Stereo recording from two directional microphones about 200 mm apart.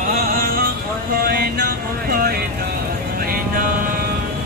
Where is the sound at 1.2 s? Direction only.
50° right (ahead or behind).